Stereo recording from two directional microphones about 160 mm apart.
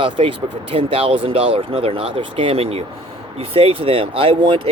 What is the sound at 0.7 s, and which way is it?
Speech, 35° right (ahead or behind).